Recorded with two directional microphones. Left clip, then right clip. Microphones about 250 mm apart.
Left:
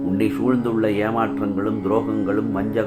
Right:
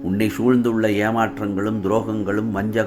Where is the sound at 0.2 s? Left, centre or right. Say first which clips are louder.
Right 3 dB; right.